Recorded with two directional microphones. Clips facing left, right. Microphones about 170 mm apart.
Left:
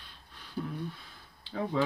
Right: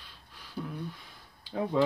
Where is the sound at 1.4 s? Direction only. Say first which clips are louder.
Right 3 dB; 10° right (ahead or behind).